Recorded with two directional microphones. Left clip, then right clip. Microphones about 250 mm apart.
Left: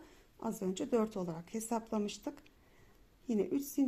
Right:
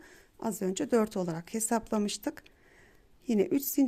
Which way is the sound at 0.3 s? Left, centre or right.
Right.